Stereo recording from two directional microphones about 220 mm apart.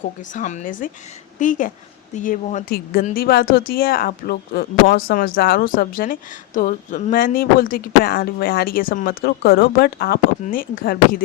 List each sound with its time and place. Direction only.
0.3 s speech: 35° left (ahead or behind)